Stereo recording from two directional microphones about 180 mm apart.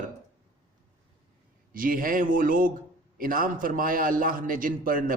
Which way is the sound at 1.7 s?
50° right (ahead or behind).